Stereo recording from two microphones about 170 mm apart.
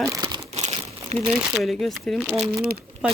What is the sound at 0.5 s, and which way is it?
Crumpling, 40° right (ahead or behind).